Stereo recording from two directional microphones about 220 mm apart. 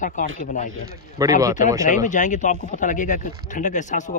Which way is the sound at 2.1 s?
35° left (ahead or behind).